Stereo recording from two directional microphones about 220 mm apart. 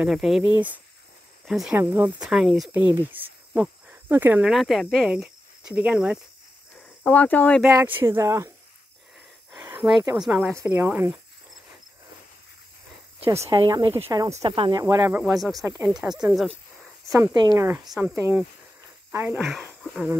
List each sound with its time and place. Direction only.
0.0 s speech: centre (ahead or behind)
7.0 s speech: 5° left (ahead or behind)
7.6 s speech: 10° right (ahead or behind)
9.5 s speech: 10° right (ahead or behind)
13.4 s speech: 20° right (ahead or behind); by 16.5 s centre (ahead or behind)
17.1 s speech: 15° right (ahead or behind)
17.8 s speech: centre (ahead or behind)
18.1 s speech: 10° right (ahead or behind)
19.4 s speech: centre (ahead or behind)